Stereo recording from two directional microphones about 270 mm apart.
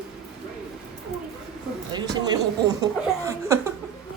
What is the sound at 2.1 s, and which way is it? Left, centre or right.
Speech, centre.